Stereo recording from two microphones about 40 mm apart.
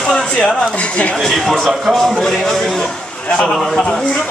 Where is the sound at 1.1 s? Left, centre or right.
Centre.